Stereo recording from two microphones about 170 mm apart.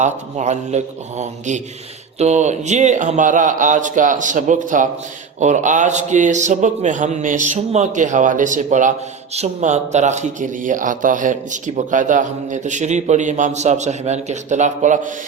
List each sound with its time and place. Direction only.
0.0 s speech: 45° right (ahead or behind)